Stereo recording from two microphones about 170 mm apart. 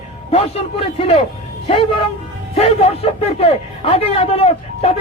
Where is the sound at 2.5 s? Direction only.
35° left (ahead or behind).